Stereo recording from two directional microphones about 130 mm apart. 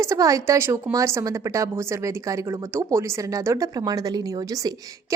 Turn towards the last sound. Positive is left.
turn(degrees=-25)  # may be behind; listen again after turning